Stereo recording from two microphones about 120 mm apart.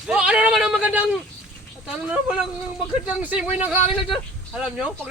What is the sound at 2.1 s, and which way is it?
Speech, 5° right (ahead or behind).